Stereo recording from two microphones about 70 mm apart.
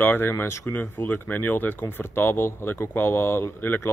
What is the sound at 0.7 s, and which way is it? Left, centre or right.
Speech, left.